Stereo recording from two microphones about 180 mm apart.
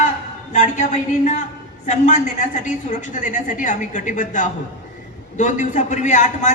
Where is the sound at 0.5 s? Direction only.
40° left (ahead or behind).